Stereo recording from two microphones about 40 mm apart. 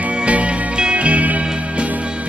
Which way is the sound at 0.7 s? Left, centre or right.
Right.